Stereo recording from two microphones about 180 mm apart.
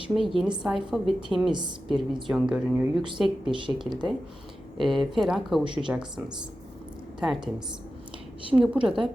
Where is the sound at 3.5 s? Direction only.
25° right (ahead or behind).